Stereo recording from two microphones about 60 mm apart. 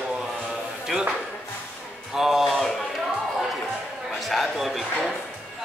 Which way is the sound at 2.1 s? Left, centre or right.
Centre.